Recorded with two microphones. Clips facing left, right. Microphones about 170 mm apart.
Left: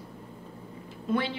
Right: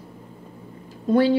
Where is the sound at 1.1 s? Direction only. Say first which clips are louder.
Right 11 dB; 40° right (ahead or behind).